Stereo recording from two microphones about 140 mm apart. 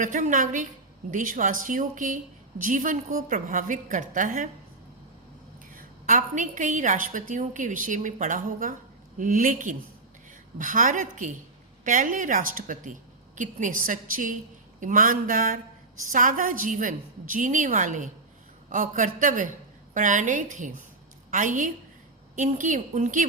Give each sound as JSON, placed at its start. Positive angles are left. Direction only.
{"t": 0.0, "sound": "a woman's voice", "side_deg": -65}
{"t": 5.7, "sound": "a woman's voice", "side_deg": -65}